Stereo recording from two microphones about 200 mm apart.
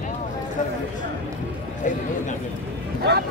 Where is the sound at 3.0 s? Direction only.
55° right (ahead or behind).